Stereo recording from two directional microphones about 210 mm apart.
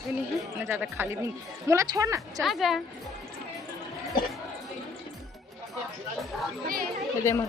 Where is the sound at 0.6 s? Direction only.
10° right (ahead or behind).